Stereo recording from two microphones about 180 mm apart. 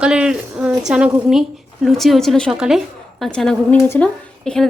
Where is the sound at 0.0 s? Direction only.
5° right (ahead or behind).